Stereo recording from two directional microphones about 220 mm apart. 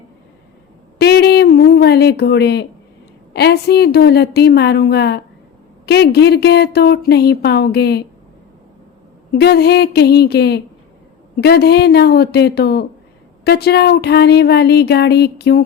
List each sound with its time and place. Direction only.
0.9 s a sound: 45° left (ahead or behind)
3.3 s speech: 45° left (ahead or behind)
9.3 s speech: 45° left (ahead or behind)